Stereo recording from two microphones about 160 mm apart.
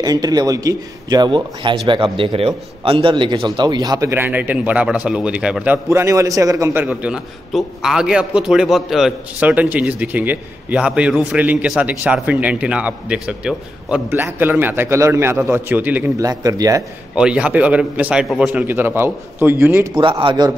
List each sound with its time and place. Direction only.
0.0 s a man's voice: 25° right (ahead or behind)
17.1 s a man's voice: 5° right (ahead or behind)
20.0 s a man's voice: 30° right (ahead or behind)